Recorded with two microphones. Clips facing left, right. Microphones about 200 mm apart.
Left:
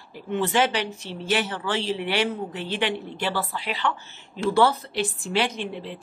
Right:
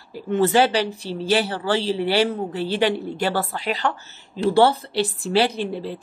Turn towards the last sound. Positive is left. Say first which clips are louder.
# right 5 dB
turn(degrees=-35)  # may be behind; listen again after turning